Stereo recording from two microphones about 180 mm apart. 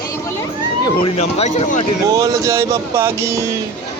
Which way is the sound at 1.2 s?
35° left (ahead or behind).